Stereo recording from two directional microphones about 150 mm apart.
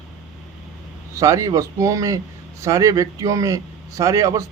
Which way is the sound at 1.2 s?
20° right (ahead or behind).